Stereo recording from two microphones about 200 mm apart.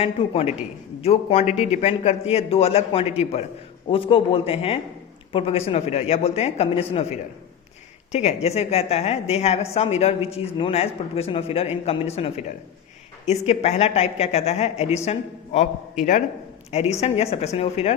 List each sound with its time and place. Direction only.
0.0 s a man's voice: 30° left (ahead or behind)